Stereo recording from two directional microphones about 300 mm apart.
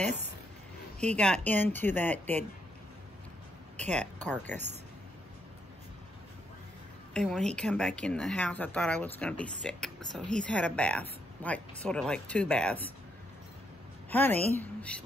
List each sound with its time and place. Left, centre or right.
0.0 s speech: right
1.1 s speech: centre
3.9 s speech: centre
7.2 s speech: centre
14.1 s a woman's voice: centre